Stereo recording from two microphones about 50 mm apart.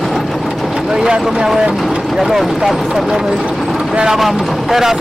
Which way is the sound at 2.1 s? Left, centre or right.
Centre.